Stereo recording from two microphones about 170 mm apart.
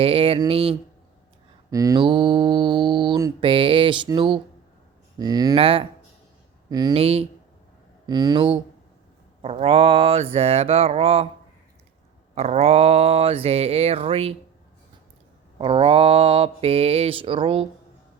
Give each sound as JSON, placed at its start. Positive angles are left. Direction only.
{"t": 0.0, "sound": "mantra", "side_deg": -35}
{"t": 1.7, "sound": "mantra", "side_deg": -20}
{"t": 6.7, "sound": "speech", "side_deg": -25}
{"t": 6.9, "sound": "mantra", "side_deg": -35}
{"t": 8.0, "sound": "mantra", "side_deg": -25}
{"t": 12.3, "sound": "mantra", "side_deg": -40}
{"t": 15.5, "sound": "mantra", "side_deg": -30}